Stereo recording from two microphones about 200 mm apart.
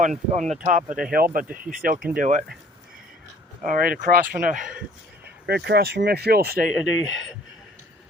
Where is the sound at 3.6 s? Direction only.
45° right (ahead or behind).